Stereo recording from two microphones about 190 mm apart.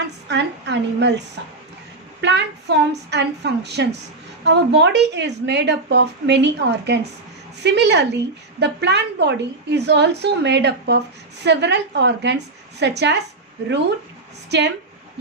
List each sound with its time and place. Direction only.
0.3 s a woman's voice: 65° right (ahead or behind)
2.2 s a woman's voice: 65° right (ahead or behind)